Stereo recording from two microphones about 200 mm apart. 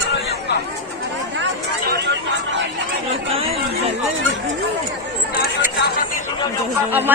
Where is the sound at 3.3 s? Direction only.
30° right (ahead or behind).